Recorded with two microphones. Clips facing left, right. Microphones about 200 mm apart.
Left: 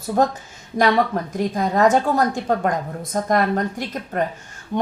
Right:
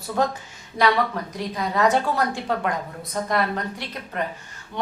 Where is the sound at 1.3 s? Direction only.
45° left (ahead or behind).